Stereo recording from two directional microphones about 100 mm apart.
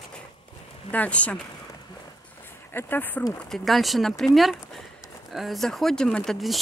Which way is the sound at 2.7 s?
20° left (ahead or behind).